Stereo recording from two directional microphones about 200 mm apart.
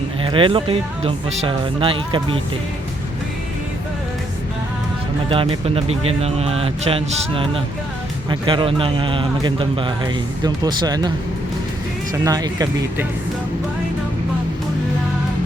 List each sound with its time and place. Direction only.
0.2 s a man's voice: 25° right (ahead or behind)
5.3 s a man's voice: 25° right (ahead or behind)
12.2 s speech: 20° right (ahead or behind)